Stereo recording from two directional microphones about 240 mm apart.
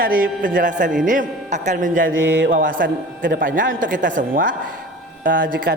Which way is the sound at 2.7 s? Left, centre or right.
Right.